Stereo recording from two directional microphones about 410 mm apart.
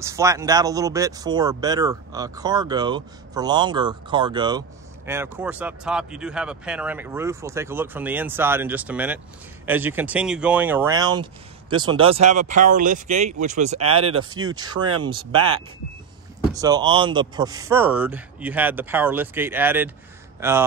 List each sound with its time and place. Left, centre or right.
0.0 s speech: centre
13.7 s speech: right
15.0 s speech: centre